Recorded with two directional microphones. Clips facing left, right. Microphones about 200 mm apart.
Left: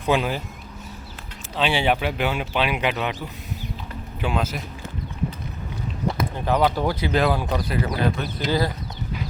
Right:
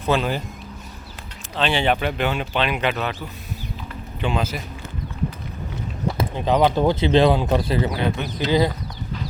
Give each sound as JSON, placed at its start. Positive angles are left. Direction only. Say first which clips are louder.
{"t": 0.1, "sound": "speech", "louder": "even", "side_deg": 15}
{"t": 1.5, "sound": "speech", "louder": "right 1 dB", "side_deg": 10}
{"t": 4.2, "sound": "a man's voice", "louder": "right 1 dB", "side_deg": 0}
{"t": 6.1, "sound": "speech", "louder": "right 3 dB", "side_deg": -20}